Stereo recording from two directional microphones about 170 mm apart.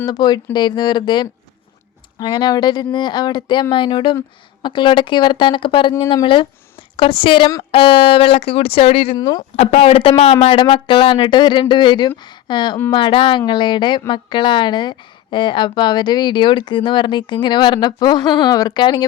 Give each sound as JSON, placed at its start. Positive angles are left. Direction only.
{"t": 0.0, "sound": "a woman's voice", "side_deg": 25}
{"t": 9.1, "sound": "a woman's voice", "side_deg": 25}
{"t": 9.6, "sound": "a woman's voice", "side_deg": 35}